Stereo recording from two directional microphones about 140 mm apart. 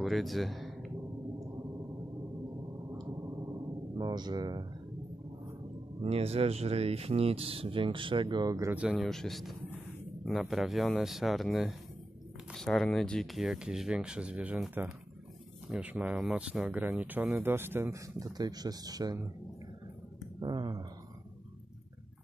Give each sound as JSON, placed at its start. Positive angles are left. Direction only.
{"t": 0.0, "sound": "a sound", "side_deg": 0}
{"t": 4.0, "sound": "speech", "side_deg": -30}
{"t": 6.0, "sound": "speech", "side_deg": -45}
{"t": 8.7, "sound": "speech", "side_deg": -5}
{"t": 20.3, "sound": "speech", "side_deg": -30}